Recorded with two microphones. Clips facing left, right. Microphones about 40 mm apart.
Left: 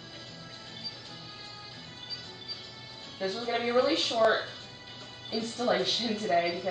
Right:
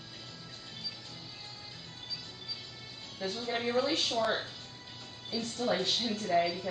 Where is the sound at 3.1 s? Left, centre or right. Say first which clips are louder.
Left 4 dB; centre.